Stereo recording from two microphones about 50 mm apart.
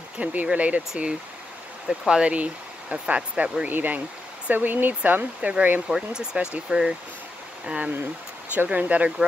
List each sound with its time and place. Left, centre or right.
0.2 s speech: right
5.9 s speech: centre; by 9.1 s right